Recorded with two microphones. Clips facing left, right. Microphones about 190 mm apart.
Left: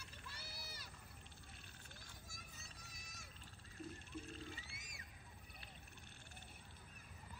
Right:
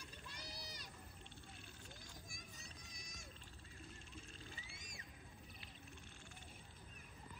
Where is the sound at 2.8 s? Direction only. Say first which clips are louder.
Right 2 dB; 5° left (ahead or behind).